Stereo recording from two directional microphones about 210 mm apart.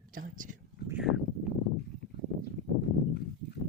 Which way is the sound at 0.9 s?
5° right (ahead or behind).